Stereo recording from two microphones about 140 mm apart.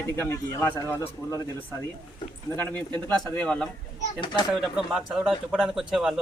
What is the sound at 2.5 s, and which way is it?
A man's voice, 15° left (ahead or behind).